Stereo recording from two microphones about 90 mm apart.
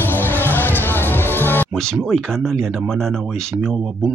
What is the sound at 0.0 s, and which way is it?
Music, 20° left (ahead or behind).